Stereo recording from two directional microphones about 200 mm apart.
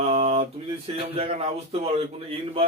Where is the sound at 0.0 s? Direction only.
30° right (ahead or behind).